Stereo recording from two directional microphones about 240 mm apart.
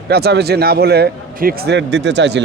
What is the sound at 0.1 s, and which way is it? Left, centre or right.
A man's voice, right.